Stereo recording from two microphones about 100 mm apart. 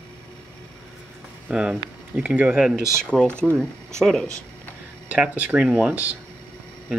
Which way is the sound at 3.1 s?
10° left (ahead or behind).